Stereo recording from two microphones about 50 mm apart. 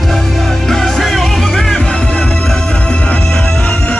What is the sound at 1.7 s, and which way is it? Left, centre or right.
Music, centre.